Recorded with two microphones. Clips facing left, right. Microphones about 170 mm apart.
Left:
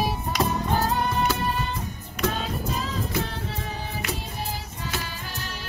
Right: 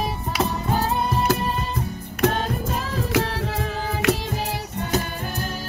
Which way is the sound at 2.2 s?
60° right (ahead or behind).